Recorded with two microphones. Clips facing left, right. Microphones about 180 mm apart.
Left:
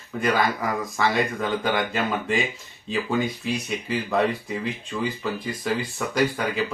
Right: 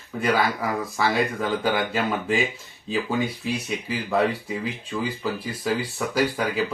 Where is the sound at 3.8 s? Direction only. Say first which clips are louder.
Even; 5° right (ahead or behind).